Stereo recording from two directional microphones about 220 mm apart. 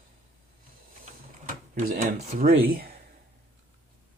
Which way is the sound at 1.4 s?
35° right (ahead or behind).